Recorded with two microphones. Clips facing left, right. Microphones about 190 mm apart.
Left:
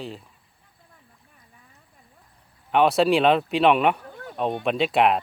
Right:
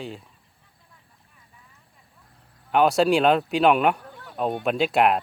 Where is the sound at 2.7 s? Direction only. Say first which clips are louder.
Even; centre (ahead or behind).